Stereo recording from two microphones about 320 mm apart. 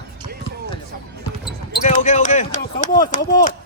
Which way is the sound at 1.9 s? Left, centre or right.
Left.